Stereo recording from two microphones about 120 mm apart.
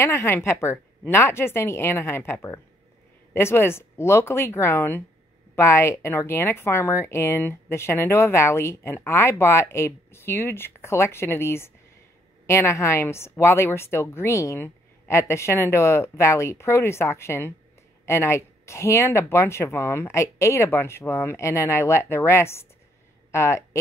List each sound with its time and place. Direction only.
0.0 s speech: 20° left (ahead or behind)